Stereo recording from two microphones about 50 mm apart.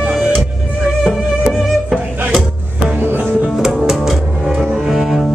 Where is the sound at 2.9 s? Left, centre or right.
Right.